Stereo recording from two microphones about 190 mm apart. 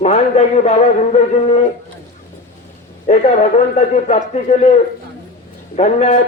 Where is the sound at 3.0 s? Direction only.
40° left (ahead or behind).